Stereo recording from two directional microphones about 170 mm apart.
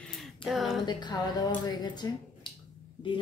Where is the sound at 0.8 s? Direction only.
25° left (ahead or behind).